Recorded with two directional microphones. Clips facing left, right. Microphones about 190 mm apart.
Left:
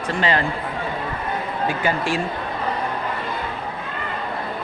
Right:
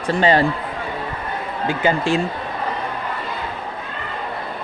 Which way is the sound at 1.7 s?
25° right (ahead or behind).